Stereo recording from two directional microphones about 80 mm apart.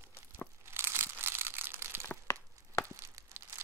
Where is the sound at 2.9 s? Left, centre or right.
Right.